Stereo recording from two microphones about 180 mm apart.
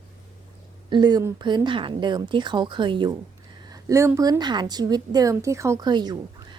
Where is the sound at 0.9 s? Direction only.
25° right (ahead or behind).